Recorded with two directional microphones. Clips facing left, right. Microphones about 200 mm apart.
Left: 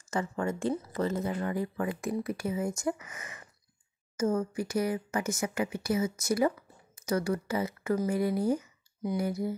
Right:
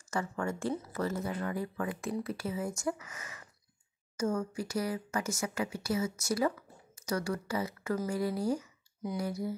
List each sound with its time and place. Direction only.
0.1 s speech: 20° left (ahead or behind)